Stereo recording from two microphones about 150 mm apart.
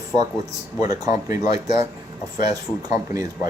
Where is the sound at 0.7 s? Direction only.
25° right (ahead or behind).